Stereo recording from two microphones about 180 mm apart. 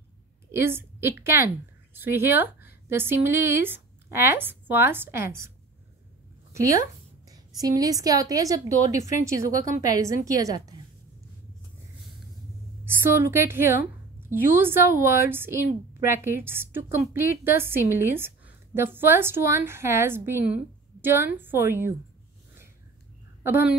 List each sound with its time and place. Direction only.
0.5 s a woman's voice: 15° right (ahead or behind)
6.5 s a woman's voice: 20° right (ahead or behind)
12.8 s a woman's voice: 10° right (ahead or behind)
23.4 s a woman's voice: 10° right (ahead or behind)